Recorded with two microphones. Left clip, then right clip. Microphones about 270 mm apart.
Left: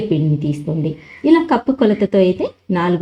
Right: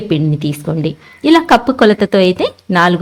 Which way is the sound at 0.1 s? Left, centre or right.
Right.